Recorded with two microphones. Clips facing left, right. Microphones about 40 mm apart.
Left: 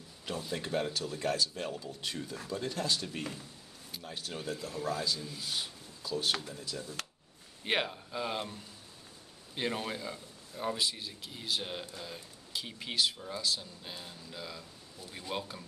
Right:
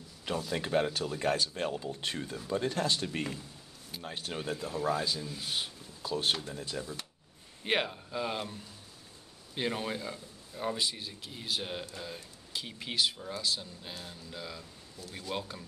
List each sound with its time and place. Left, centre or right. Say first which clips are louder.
0.6 s speech: right 4 dB; right; by 5.4 s centre
5.4 s speech: right 2 dB; right
7.6 s a man's voice: right 1 dB; centre
9.6 s a man's voice: right 1 dB; centre